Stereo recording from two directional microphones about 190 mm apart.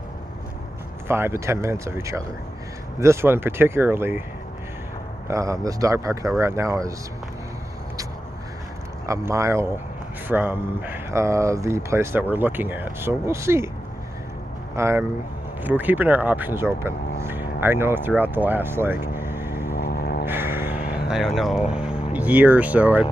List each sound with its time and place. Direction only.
1.0 s speech: 10° right (ahead or behind)
5.3 s speech: 15° right (ahead or behind)
9.0 s speech: 15° right (ahead or behind)
14.8 s speech: 15° right (ahead or behind)
19.1 s vehicle: 10° right (ahead or behind)
19.6 s a sound: 55° left (ahead or behind)
20.2 s music: 10° right (ahead or behind)
20.8 s vehicle: 55° left (ahead or behind)
21.1 s speech: centre (ahead or behind)